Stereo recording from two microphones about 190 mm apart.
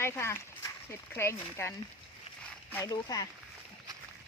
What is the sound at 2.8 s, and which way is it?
Speech, 20° left (ahead or behind).